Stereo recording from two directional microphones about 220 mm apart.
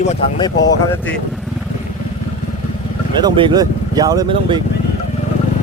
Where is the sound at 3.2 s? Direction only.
20° right (ahead or behind).